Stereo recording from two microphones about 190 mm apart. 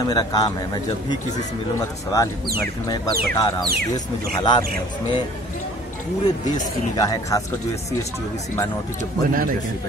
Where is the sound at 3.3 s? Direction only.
20° left (ahead or behind).